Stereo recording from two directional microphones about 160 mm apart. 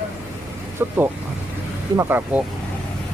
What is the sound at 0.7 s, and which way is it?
Vehicle, 15° right (ahead or behind).